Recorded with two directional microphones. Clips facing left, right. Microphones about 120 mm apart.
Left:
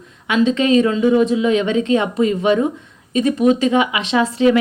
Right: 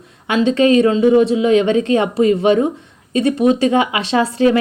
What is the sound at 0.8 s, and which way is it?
Speech, 30° right (ahead or behind).